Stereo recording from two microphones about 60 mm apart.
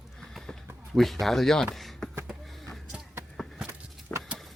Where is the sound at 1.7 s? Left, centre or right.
Centre.